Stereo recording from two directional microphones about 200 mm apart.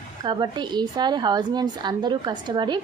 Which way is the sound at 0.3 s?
20° right (ahead or behind).